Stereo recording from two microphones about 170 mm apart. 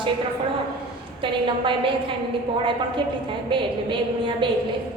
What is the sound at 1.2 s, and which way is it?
Speech, 30° right (ahead or behind).